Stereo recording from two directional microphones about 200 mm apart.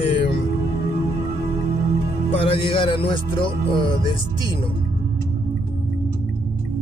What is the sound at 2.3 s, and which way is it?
Speech, 30° left (ahead or behind).